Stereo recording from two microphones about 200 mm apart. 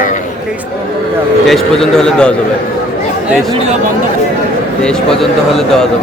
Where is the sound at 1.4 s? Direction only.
Centre (ahead or behind).